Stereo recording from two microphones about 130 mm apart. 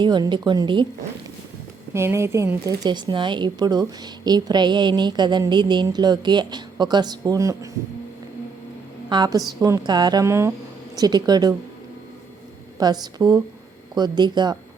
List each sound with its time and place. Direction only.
0.0 s speech: 35° right (ahead or behind)
1.9 s speech: 20° right (ahead or behind)
9.0 s a woman's voice: 35° right (ahead or behind)
10.9 s speech: 30° right (ahead or behind)
12.8 s speech: 30° right (ahead or behind)